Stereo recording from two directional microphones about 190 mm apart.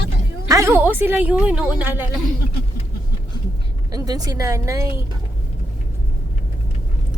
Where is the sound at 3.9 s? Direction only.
20° right (ahead or behind).